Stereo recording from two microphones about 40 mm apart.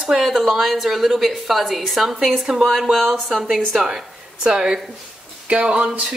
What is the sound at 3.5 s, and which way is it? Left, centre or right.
Speech, centre.